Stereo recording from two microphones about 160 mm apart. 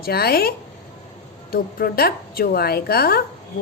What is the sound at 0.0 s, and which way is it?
A woman's voice, 75° left (ahead or behind).